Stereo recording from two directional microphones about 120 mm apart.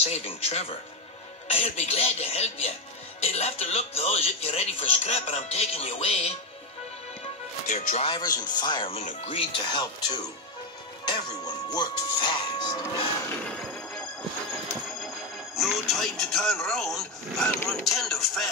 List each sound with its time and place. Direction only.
0.0 s speech: 60° left (ahead or behind)
7.6 s speech: 90° left
8.0 s speech: 40° left (ahead or behind)
8.9 s speech: 60° left (ahead or behind); by 12.8 s 35° left (ahead or behind)
15.5 s speech: centre (ahead or behind)